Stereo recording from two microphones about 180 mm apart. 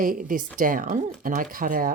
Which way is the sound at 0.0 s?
50° right (ahead or behind).